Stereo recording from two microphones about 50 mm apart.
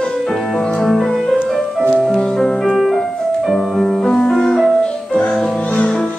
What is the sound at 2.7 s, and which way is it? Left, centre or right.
Music, centre.